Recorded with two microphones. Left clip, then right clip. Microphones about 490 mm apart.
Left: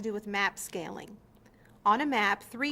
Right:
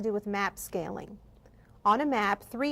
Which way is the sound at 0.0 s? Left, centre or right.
Right.